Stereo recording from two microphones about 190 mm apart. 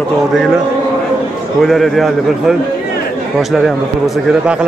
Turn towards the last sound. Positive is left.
turn(degrees=-5)  # may be behind; listen again after turning